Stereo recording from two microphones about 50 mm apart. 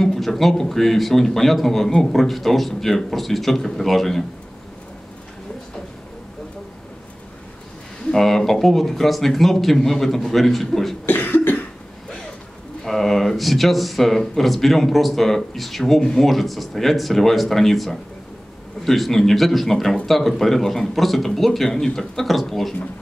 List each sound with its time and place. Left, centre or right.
0.0 s speech: centre
8.1 s speech: centre
11.1 s cough: left
12.8 s speech: centre